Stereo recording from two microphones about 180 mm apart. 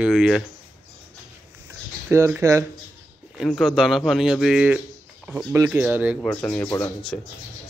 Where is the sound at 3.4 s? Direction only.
Centre (ahead or behind).